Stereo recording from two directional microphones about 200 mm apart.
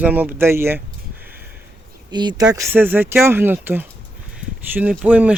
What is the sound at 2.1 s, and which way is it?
Speech, 20° right (ahead or behind).